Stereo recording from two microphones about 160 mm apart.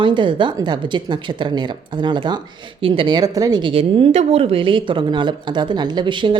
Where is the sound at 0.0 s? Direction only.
30° right (ahead or behind).